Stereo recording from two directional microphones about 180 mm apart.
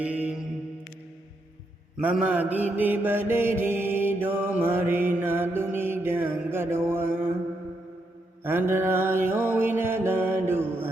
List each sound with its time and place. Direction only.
0.0 s mantra: 5° right (ahead or behind)
2.0 s mantra: 10° right (ahead or behind)
8.4 s music: 10° right (ahead or behind)